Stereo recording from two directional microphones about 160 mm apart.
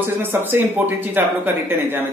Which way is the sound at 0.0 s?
15° right (ahead or behind).